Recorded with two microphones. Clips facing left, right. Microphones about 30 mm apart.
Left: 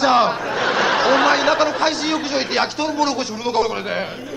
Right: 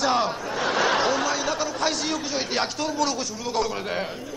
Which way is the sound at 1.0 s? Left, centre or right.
Left.